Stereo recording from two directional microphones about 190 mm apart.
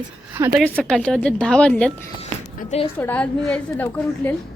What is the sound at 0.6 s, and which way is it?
A woman's voice, 5° left (ahead or behind).